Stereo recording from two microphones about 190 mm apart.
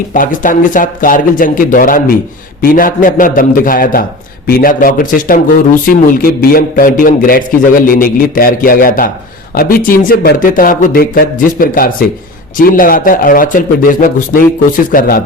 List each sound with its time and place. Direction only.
0.1 s a man's voice: 45° left (ahead or behind)